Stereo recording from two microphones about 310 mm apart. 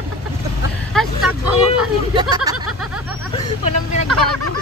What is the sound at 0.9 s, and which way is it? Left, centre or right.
Vehicle, centre.